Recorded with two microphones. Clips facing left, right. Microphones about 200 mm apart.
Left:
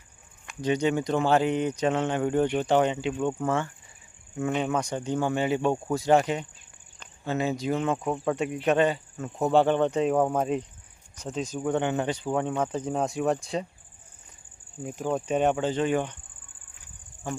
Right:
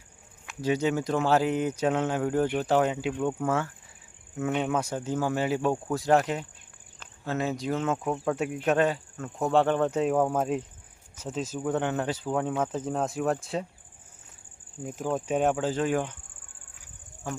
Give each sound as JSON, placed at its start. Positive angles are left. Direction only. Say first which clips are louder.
{"t": 0.4, "sound": "speech", "louder": "left 1 dB", "side_deg": -5}
{"t": 14.8, "sound": "speech", "louder": "left 1 dB", "side_deg": 0}
{"t": 17.2, "sound": "speech", "louder": "left 2 dB", "side_deg": 0}